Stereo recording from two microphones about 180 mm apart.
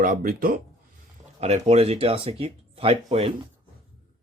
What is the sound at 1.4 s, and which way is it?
Speech, 35° right (ahead or behind).